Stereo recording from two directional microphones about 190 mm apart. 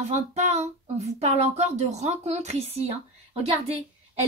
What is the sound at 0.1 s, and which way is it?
Speech, 35° right (ahead or behind).